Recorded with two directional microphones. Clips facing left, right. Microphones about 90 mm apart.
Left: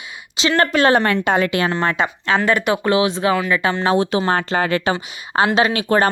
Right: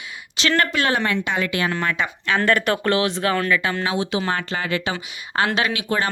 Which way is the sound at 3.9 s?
45° left (ahead or behind).